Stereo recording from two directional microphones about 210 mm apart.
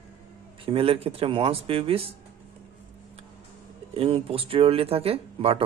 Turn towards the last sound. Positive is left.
turn(degrees=-25)  # may be behind; listen again after turning